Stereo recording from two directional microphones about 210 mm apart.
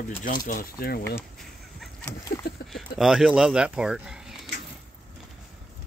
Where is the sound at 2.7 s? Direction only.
Centre (ahead or behind).